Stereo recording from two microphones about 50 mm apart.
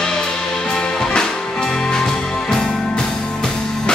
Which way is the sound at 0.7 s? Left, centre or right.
Centre.